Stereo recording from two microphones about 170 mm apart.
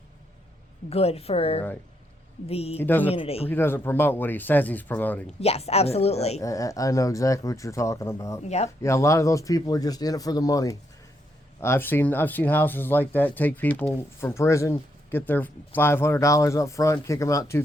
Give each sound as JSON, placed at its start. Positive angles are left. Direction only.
{"t": 0.9, "sound": "a woman's voice", "side_deg": 35}
{"t": 2.7, "sound": "speech", "side_deg": 10}
{"t": 3.1, "sound": "a woman's voice", "side_deg": 35}
{"t": 3.5, "sound": "speech", "side_deg": 15}
{"t": 5.4, "sound": "a woman's voice", "side_deg": 35}
{"t": 6.4, "sound": "speech", "side_deg": 20}
{"t": 8.4, "sound": "a woman's voice", "side_deg": 40}
{"t": 8.8, "sound": "speech", "side_deg": 15}